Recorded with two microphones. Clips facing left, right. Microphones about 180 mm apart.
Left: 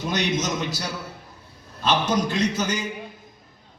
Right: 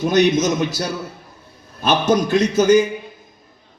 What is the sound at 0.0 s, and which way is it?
A man's voice, 50° right (ahead or behind).